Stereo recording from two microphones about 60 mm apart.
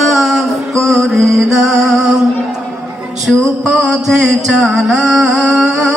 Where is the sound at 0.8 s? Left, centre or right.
Centre.